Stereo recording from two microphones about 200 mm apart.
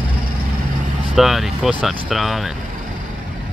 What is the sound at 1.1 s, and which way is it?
Speech, centre (ahead or behind).